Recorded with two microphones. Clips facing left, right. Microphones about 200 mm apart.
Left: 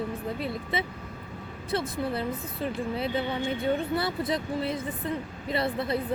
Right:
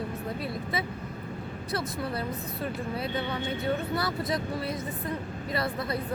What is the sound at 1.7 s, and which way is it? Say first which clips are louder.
Speech: left 3 dB; 25° left (ahead or behind).